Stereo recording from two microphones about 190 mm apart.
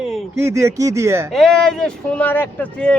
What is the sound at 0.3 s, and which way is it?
Speech, 15° right (ahead or behind).